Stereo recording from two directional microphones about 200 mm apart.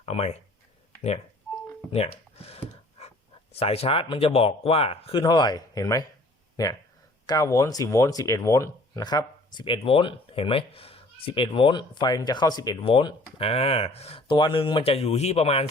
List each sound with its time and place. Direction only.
0.0 s speech: 30° left (ahead or behind)
1.9 s speech: 30° left (ahead or behind)
3.6 s speech: 30° left (ahead or behind)